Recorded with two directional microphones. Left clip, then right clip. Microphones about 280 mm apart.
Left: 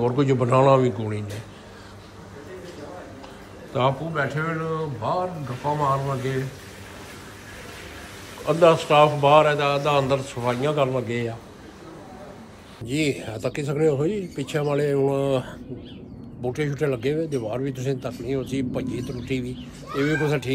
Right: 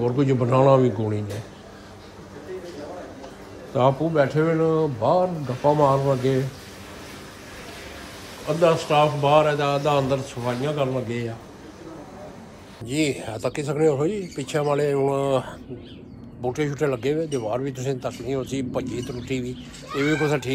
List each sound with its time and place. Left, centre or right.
0.0 s a man's voice: centre
3.7 s a man's voice: centre
8.5 s a man's voice: centre
12.8 s speech: centre